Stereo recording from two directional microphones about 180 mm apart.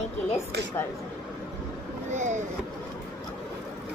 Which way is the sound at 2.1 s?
40° right (ahead or behind).